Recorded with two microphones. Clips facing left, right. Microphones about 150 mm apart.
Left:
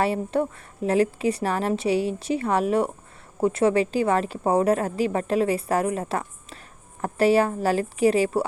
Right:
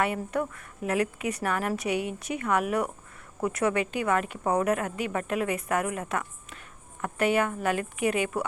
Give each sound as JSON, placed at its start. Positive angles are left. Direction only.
{"t": 0.0, "sound": "a woman's voice", "side_deg": 30}